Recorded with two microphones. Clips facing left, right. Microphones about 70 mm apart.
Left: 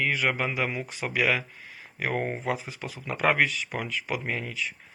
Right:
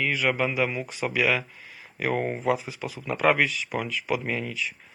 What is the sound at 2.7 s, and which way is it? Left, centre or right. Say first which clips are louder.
A man's voice: right 3 dB; left.